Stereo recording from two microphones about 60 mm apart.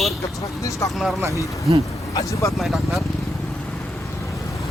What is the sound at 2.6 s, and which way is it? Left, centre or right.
Speech, centre.